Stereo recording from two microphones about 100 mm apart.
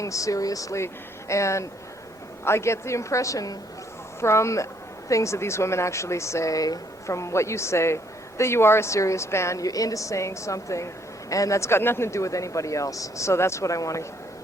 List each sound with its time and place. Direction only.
0.0 s speech: 35° left (ahead or behind)